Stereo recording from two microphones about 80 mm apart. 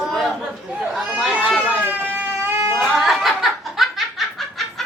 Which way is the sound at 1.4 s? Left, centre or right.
Centre.